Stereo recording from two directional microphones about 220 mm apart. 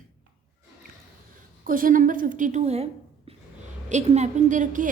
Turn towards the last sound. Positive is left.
turn(degrees=-35)  # may be behind; listen again after turning